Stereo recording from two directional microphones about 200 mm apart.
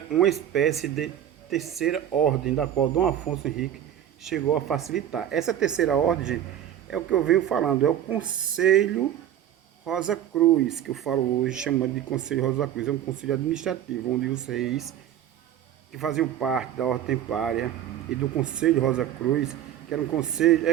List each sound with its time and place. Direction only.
0.1 s speech: centre (ahead or behind)
16.0 s speech: centre (ahead or behind)